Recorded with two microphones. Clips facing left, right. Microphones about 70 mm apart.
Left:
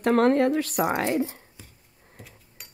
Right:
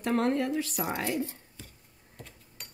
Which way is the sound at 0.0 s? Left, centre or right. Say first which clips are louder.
Left 8 dB; left.